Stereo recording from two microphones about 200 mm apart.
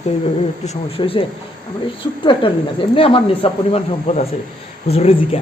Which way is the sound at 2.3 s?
25° left (ahead or behind).